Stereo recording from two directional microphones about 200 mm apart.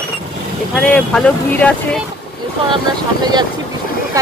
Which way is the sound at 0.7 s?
5° left (ahead or behind).